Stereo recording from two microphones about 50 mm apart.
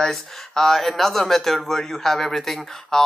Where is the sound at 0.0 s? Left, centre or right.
Centre.